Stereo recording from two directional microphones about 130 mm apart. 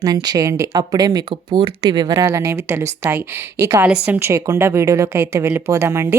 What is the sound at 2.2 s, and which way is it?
A woman's voice, 20° right (ahead or behind).